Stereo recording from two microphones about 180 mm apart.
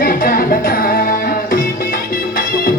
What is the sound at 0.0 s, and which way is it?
Music, 50° left (ahead or behind).